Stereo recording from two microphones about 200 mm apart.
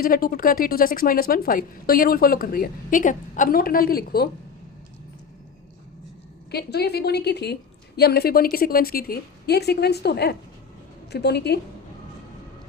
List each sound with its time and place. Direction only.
0.0 s a woman's voice: 45° left (ahead or behind)
6.5 s a woman's voice: 55° left (ahead or behind)